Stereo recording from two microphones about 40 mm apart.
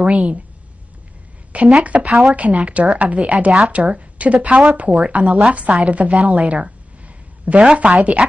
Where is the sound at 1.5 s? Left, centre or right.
Right.